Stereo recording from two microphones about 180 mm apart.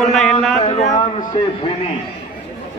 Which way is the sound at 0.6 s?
35° left (ahead or behind).